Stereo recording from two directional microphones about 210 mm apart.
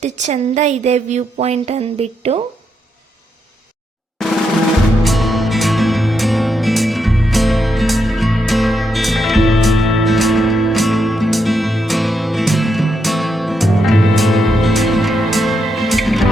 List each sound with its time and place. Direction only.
0.0 s speech: 35° right (ahead or behind)
5.0 s music: centre (ahead or behind)